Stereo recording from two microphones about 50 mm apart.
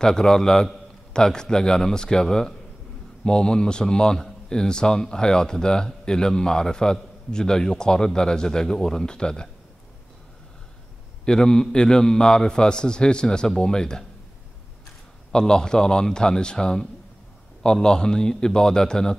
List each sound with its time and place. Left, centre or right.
0.0 s speech: centre
11.2 s speech: centre
15.3 s speech: centre